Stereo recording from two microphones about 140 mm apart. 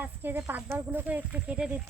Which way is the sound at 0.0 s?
15° right (ahead or behind).